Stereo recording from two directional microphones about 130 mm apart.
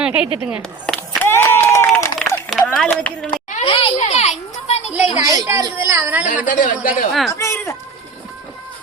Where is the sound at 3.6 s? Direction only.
45° left (ahead or behind).